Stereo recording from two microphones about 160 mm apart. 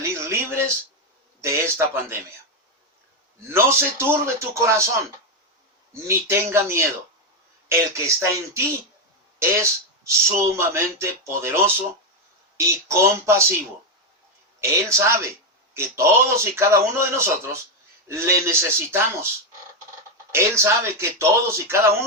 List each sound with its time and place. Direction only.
0.0 s a sound: 15° right (ahead or behind)
1.4 s speech: 15° right (ahead or behind)
3.5 s speech: 15° right (ahead or behind)
5.9 s speech: 15° right (ahead or behind)
14.6 s speech: 15° right (ahead or behind)
20.3 s speech: 15° right (ahead or behind)